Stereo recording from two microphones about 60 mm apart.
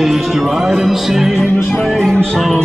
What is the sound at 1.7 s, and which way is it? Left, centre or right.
Music, centre.